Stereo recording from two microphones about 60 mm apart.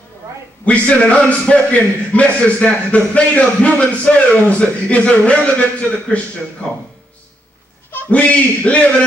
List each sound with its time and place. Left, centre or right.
0.7 s a man's voice: left
8.1 s a man's voice: left